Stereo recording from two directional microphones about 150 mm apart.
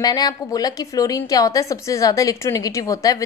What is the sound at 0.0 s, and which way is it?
A woman's voice, 25° left (ahead or behind).